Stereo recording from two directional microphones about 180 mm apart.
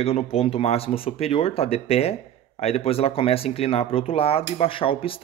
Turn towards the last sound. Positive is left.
turn(degrees=30)  # may be behind; listen again after turning